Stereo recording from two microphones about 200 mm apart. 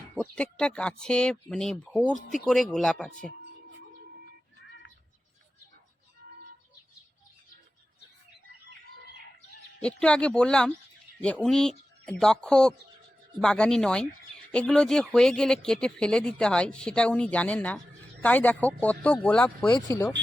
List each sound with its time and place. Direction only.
0.2 s speech: 5° left (ahead or behind)
9.8 s speech: 5° left (ahead or behind)